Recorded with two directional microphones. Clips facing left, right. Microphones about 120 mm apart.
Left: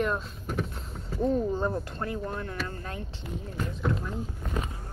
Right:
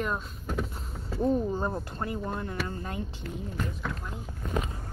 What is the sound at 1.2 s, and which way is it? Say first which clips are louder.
Speech: even; 10° right (ahead or behind).